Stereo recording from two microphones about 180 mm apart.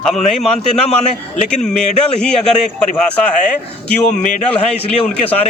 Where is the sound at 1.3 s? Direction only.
40° left (ahead or behind).